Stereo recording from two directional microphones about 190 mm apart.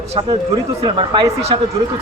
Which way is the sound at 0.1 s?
30° right (ahead or behind).